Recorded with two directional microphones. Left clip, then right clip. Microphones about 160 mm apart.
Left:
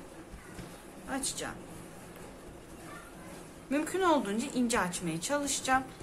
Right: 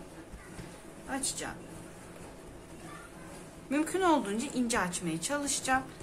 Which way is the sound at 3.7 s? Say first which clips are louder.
Right 1 dB; centre (ahead or behind).